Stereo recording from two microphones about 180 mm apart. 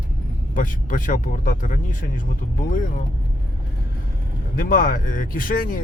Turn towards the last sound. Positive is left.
turn(degrees=50)  # may be behind; listen again after turning